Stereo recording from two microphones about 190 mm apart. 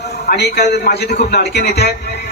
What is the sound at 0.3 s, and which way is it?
A man's voice, 60° left (ahead or behind).